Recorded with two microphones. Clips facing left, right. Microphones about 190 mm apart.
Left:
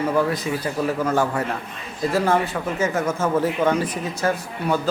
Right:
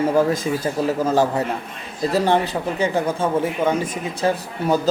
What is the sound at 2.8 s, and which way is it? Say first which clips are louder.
A man's voice: right 1 dB; 30° right (ahead or behind).